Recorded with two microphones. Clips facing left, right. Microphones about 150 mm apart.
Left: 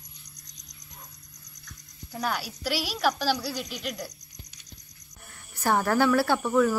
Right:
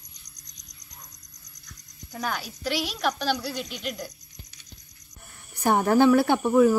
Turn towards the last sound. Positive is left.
turn(degrees=-20)  # may be behind; listen again after turning